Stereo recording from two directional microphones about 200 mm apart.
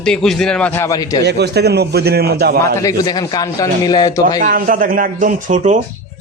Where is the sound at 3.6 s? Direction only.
20° left (ahead or behind).